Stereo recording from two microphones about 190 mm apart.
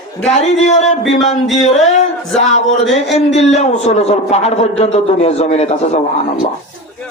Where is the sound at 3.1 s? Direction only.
35° left (ahead or behind).